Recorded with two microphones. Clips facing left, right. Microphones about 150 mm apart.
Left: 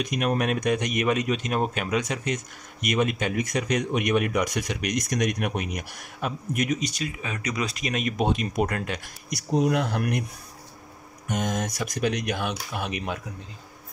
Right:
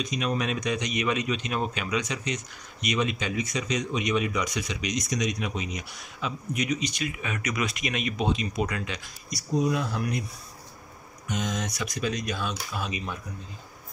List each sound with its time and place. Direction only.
0.0 s speech: 55° left (ahead or behind)
9.5 s speech: 75° left (ahead or behind)
11.2 s speech: 55° left (ahead or behind); by 13.2 s 70° left (ahead or behind)